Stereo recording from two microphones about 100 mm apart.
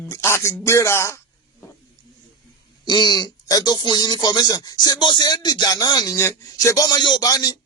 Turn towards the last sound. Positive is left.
turn(degrees=40)  # may be behind; listen again after turning